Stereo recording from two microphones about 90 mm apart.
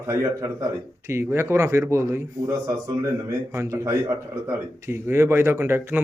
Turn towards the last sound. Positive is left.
turn(degrees=-25)  # may be behind; listen again after turning